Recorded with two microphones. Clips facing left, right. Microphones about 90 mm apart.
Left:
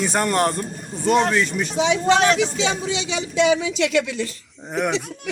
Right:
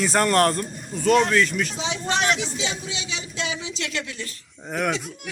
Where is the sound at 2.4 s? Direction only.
75° left (ahead or behind).